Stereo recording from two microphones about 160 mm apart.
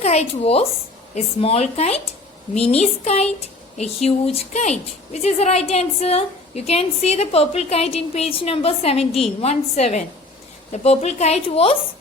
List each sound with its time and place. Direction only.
0.0 s speech: 40° left (ahead or behind)